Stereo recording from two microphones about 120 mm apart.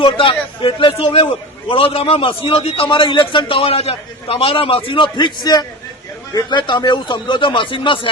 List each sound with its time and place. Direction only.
0.0 s a man's voice: 45° left (ahead or behind)